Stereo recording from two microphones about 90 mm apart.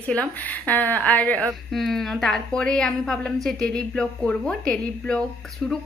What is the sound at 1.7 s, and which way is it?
A woman's voice, centre (ahead or behind).